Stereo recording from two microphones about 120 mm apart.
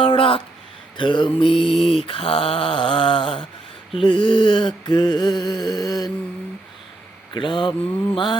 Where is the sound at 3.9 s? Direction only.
45° left (ahead or behind).